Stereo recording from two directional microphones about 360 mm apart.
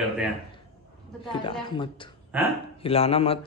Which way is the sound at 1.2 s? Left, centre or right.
Centre.